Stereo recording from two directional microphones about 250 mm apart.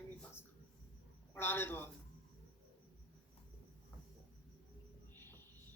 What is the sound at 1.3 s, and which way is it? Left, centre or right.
Speech, centre.